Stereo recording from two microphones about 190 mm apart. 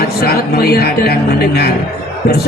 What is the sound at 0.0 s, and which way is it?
Speech, 55° left (ahead or behind).